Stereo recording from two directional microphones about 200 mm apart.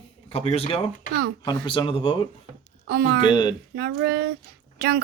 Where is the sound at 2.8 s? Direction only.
55° right (ahead or behind).